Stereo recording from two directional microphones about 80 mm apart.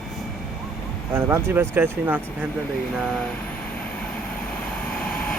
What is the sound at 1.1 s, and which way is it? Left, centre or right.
Speech, right.